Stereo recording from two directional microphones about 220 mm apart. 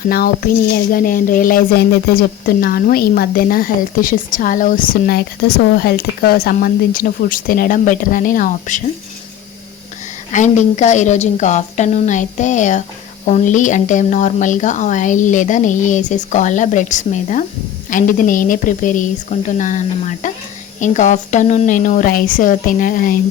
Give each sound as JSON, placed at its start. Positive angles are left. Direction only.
{"t": 0.0, "sound": "speech", "side_deg": 45}
{"t": 10.3, "sound": "speech", "side_deg": 35}